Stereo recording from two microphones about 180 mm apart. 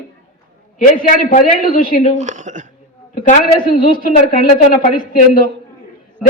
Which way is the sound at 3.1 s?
50° left (ahead or behind).